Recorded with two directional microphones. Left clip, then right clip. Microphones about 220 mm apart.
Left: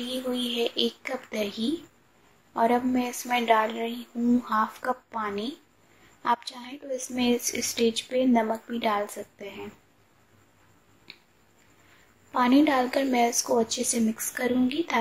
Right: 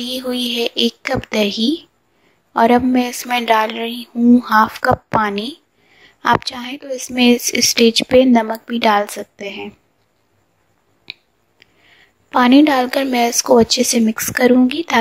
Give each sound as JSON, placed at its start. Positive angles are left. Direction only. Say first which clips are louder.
{"t": 0.0, "sound": "a woman's voice", "louder": "right 9 dB", "side_deg": -40}
{"t": 11.1, "sound": "a sound", "louder": "right 15 dB", "side_deg": -35}
{"t": 12.3, "sound": "a woman's voice", "louder": "right 10 dB", "side_deg": -40}